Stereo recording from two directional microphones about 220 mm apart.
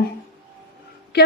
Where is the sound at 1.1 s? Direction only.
45° left (ahead or behind).